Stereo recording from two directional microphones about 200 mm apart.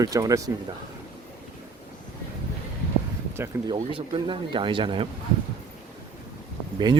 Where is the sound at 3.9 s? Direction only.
25° right (ahead or behind).